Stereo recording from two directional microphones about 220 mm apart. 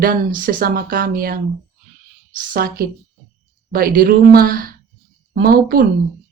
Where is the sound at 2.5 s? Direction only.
40° right (ahead or behind).